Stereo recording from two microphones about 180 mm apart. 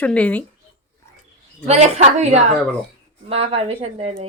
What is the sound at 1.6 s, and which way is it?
Speech, 40° right (ahead or behind).